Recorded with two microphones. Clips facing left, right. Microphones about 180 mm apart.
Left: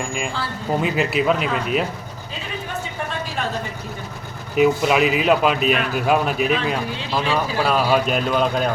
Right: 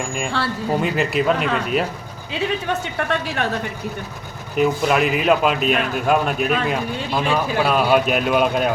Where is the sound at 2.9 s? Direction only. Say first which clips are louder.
Right 4 dB; 70° right (ahead or behind).